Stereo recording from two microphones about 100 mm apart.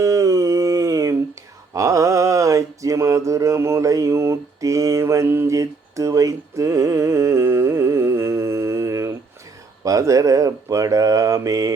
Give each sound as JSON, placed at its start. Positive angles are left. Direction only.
{"t": 0.0, "sound": "a sound", "side_deg": -30}
{"t": 1.7, "sound": "mantra", "side_deg": -30}
{"t": 9.8, "sound": "speech", "side_deg": -35}